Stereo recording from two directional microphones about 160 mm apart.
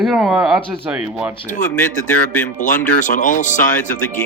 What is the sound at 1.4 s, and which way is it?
Speech, 50° left (ahead or behind).